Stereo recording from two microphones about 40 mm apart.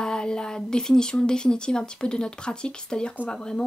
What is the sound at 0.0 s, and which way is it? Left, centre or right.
Speech, centre.